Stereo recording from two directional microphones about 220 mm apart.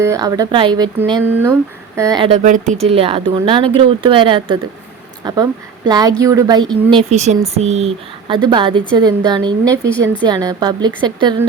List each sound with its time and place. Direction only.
0.0 s a woman's voice: 15° right (ahead or behind)
2.0 s speech: 15° right (ahead or behind)
2.4 s a woman's voice: 35° right (ahead or behind); by 6.7 s 20° right (ahead or behind)
6.9 s speech: 30° right (ahead or behind)